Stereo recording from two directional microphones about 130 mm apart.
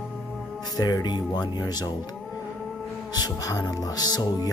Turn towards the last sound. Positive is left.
turn(degrees=30)  # may be behind; listen again after turning